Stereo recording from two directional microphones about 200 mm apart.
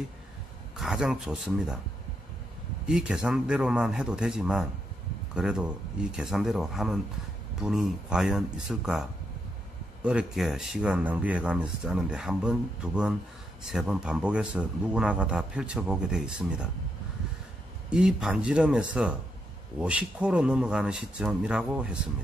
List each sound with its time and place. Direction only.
0.7 s speech: 5° right (ahead or behind)
2.9 s speech: 5° right (ahead or behind)
10.0 s speech: 5° right (ahead or behind)
17.8 s speech: 5° right (ahead or behind)